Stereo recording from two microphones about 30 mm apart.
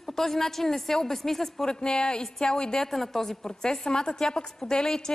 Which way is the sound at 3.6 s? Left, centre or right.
Left.